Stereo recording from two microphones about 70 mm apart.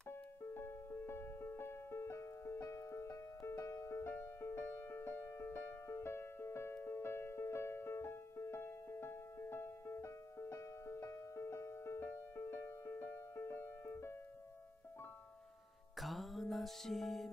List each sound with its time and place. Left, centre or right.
0.1 s music: left
4.0 s music: left
16.0 s music: centre